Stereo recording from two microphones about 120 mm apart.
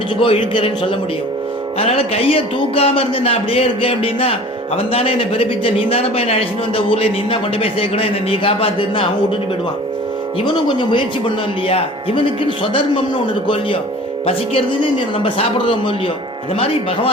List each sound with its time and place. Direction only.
0.2 s speech: 45° left (ahead or behind)
10.4 s speech: 40° left (ahead or behind)
14.3 s speech: 50° left (ahead or behind)